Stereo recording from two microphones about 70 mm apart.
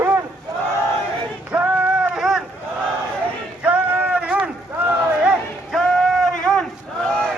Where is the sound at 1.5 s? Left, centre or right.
Centre.